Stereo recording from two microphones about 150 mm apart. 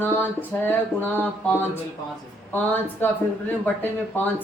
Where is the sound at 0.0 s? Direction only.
15° left (ahead or behind).